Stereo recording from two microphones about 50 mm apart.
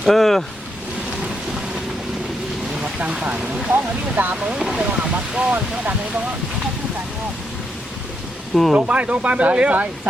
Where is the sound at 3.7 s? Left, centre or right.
Right.